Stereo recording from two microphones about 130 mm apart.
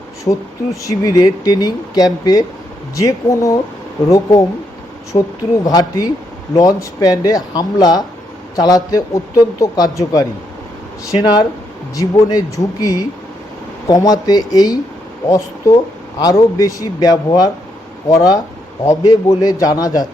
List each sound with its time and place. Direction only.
0.3 s speech: 25° left (ahead or behind)
5.1 s speech: 40° left (ahead or behind)
5.6 s speech: 30° left (ahead or behind)
11.1 s speech: 30° left (ahead or behind)